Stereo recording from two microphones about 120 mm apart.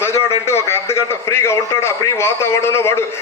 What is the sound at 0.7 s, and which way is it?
A man's voice, 20° left (ahead or behind).